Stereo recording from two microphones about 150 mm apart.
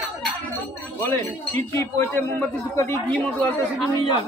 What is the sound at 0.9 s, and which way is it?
Speech, 20° left (ahead or behind).